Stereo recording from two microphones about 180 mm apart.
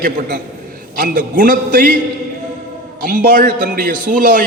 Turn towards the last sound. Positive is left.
turn(degrees=-50)  # may be behind; listen again after turning